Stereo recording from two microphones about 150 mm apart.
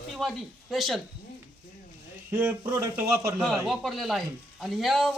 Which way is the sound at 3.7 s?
Centre (ahead or behind).